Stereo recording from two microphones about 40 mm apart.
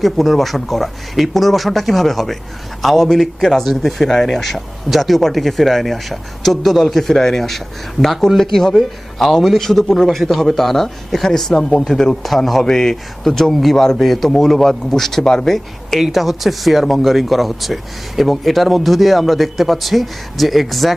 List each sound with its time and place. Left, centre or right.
0.0 s a man's voice: centre
16.0 s speech: centre